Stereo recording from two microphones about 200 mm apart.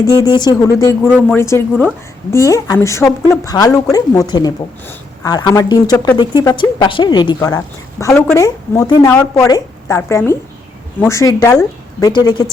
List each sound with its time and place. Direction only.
0.0 s a woman's voice: 15° left (ahead or behind)